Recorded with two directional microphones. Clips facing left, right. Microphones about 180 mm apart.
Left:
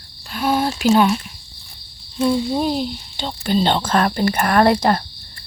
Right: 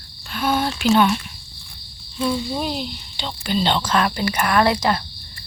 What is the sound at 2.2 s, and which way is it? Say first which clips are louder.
Speech: left 5 dB; 25° left (ahead or behind).